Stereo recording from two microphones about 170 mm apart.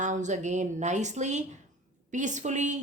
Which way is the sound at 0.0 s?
45° right (ahead or behind).